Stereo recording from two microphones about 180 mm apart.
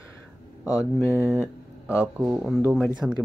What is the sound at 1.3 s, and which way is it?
Speech, 10° right (ahead or behind).